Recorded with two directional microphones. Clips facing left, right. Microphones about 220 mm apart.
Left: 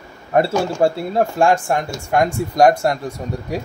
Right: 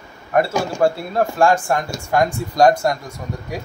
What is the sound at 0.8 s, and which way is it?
Speech, 25° left (ahead or behind).